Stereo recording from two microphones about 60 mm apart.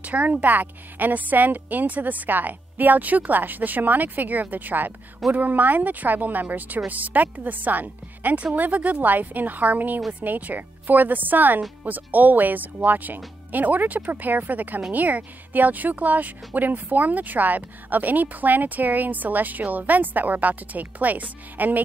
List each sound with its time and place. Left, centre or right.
0.0 s speech: right